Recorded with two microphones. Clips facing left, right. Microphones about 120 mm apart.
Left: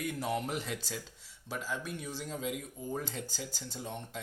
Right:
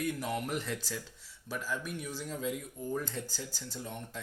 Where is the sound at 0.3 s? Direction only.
20° left (ahead or behind).